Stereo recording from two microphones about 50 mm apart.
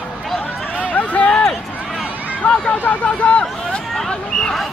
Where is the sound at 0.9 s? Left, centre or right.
Left.